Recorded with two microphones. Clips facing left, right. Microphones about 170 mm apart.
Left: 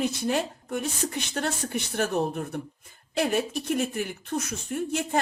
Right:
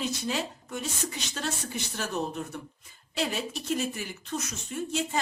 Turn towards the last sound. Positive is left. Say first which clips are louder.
# left 4 dB
turn(degrees=55)  # may be behind; listen again after turning